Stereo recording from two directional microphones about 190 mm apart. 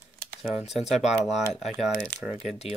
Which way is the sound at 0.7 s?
Centre (ahead or behind).